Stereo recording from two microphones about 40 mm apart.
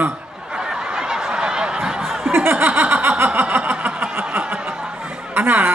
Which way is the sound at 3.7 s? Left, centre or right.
Right.